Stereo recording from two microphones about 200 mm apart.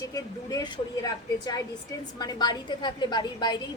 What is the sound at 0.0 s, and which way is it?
A woman's voice, 20° left (ahead or behind).